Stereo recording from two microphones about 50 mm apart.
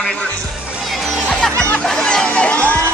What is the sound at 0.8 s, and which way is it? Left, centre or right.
Music, centre.